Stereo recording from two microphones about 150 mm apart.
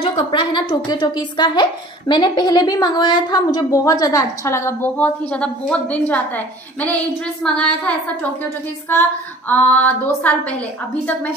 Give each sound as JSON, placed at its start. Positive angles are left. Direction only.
{"t": 0.0, "sound": "a woman's voice", "side_deg": 35}
{"t": 9.5, "sound": "a woman's voice", "side_deg": 10}